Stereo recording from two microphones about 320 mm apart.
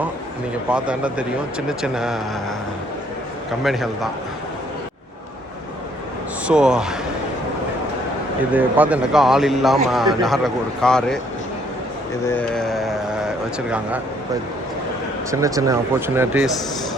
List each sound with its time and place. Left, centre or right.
0.7 s speech: centre
3.6 s speech: centre
6.5 s speech: centre
8.5 s speech: centre
12.3 s speech: centre
15.3 s speech: centre